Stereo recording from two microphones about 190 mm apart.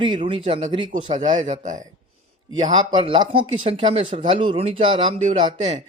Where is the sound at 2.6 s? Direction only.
25° right (ahead or behind).